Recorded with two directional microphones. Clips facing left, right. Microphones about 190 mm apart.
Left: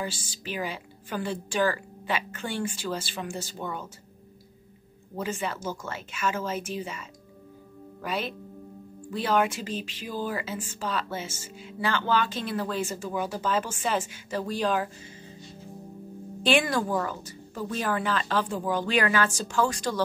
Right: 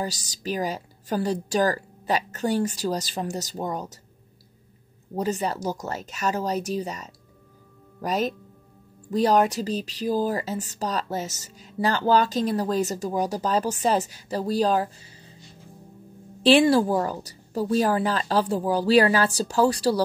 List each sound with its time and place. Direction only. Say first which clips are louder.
0.0 s speech: right 4 dB; 40° right (ahead or behind)
5.1 s speech: right 5 dB; 40° right (ahead or behind)
16.4 s speech: right 7 dB; 30° right (ahead or behind)